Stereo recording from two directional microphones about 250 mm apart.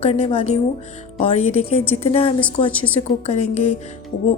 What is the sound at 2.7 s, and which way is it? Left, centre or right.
Speech, centre.